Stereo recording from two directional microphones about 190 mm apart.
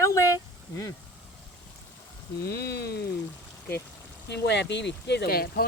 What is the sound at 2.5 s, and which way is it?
Speech, 60° left (ahead or behind).